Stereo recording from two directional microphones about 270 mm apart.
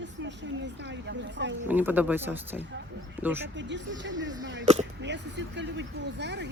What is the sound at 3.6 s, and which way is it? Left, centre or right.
Speech, right.